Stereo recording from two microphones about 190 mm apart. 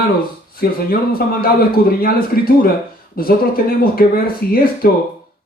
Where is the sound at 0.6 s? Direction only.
50° left (ahead or behind).